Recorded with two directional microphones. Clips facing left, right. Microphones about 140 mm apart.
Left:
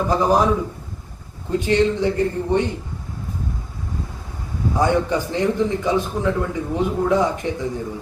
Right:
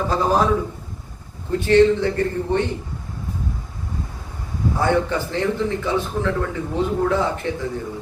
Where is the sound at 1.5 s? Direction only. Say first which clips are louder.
Right 3 dB; 15° left (ahead or behind).